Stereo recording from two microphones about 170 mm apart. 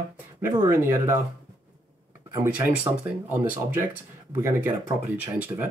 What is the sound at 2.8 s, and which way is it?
Speech, 10° right (ahead or behind).